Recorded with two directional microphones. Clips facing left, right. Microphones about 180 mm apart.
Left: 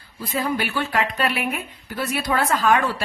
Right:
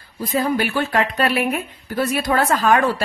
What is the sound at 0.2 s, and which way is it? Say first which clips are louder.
A woman's voice: right 4 dB; 40° right (ahead or behind).